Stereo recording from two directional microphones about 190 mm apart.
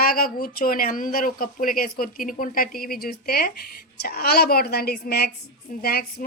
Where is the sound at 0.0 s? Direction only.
50° left (ahead or behind).